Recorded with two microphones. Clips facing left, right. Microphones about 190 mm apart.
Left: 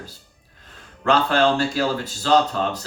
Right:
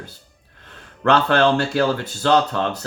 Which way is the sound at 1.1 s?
60° right (ahead or behind).